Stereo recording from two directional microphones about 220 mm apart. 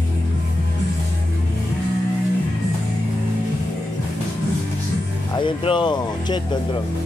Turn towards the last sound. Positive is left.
turn(degrees=20)  # may be behind; listen again after turning